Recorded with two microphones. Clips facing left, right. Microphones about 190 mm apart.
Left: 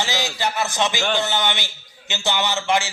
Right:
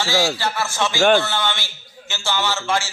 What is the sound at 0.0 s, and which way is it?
A man's voice, 20° left (ahead or behind).